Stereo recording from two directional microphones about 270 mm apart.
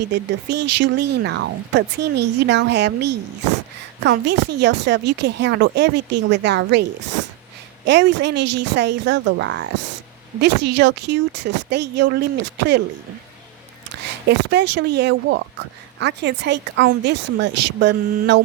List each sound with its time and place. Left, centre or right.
0.1 s speech: right
7.9 s speech: right
14.3 s speech: right